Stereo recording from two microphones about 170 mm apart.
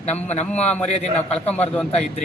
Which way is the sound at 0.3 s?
40° left (ahead or behind).